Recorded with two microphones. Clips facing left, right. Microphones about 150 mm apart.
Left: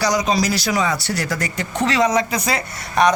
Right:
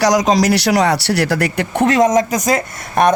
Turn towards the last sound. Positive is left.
turn(degrees=-50)  # may be behind; listen again after turning